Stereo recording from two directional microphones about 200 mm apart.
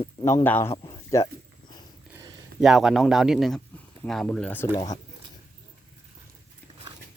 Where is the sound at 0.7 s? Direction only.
25° left (ahead or behind).